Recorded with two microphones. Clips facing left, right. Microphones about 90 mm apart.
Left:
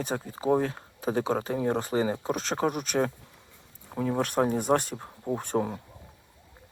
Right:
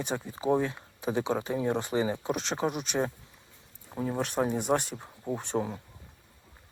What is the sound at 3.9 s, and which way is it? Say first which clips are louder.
Speech: left 3 dB; 60° left (ahead or behind).